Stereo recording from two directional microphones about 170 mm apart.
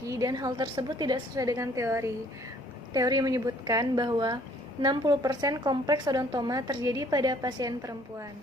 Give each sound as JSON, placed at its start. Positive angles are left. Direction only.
{"t": 0.1, "sound": "a woman's voice", "side_deg": -20}